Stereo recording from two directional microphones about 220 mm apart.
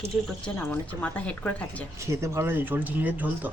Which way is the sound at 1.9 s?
15° right (ahead or behind).